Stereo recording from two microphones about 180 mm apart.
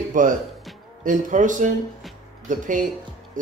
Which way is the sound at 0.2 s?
45° right (ahead or behind).